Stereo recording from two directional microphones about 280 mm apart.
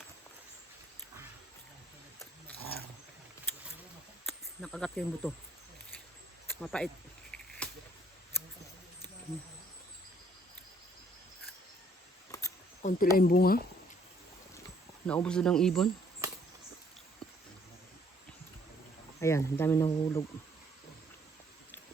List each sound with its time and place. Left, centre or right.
4.3 s speech: centre
6.6 s a sound: centre
12.8 s speech: left
15.0 s speech: centre
19.2 s speech: centre